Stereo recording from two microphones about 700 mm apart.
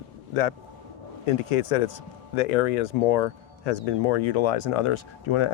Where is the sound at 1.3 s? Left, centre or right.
Left.